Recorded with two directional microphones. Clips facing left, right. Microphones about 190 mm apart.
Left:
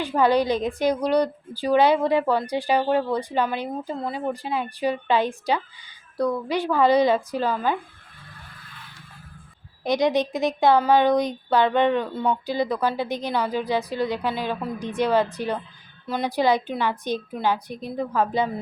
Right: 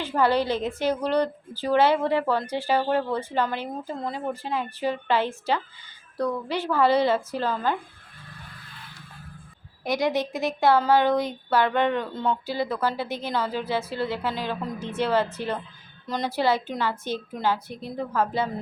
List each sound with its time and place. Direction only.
0.0 s a woman's voice: 15° left (ahead or behind)
9.8 s a woman's voice: 20° left (ahead or behind)